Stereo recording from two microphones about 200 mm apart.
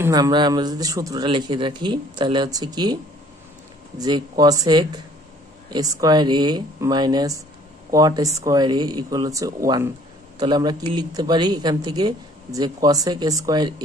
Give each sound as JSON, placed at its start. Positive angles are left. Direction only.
{"t": 0.0, "sound": "speech", "side_deg": -20}
{"t": 4.0, "sound": "speech", "side_deg": -20}